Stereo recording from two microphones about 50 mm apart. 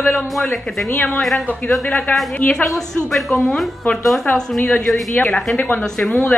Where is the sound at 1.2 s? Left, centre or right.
Centre.